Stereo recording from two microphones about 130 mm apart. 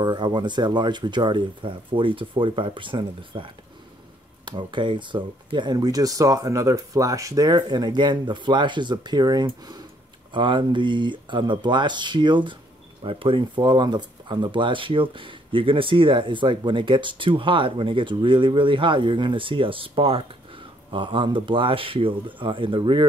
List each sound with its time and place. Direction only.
0.0 s speech: 35° right (ahead or behind)